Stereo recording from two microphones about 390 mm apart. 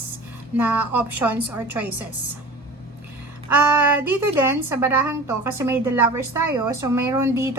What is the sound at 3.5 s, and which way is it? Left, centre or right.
A woman's voice, centre.